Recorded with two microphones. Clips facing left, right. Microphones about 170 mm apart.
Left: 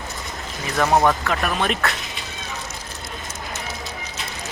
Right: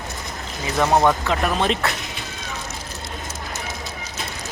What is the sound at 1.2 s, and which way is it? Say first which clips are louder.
Speech: right 2 dB; 20° right (ahead or behind).